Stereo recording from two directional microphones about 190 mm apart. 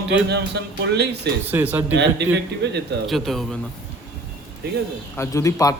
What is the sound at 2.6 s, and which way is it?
Speech, 65° right (ahead or behind).